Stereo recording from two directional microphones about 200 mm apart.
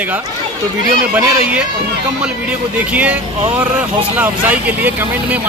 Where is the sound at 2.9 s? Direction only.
5° right (ahead or behind).